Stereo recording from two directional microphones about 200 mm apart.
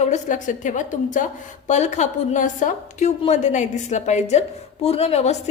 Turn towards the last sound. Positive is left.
turn(degrees=35)  # may be behind; listen again after turning